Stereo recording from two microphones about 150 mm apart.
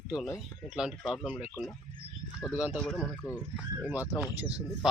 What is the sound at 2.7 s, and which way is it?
Speech, 5° left (ahead or behind).